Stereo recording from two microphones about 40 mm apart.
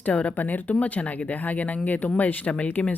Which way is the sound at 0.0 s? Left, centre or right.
Left.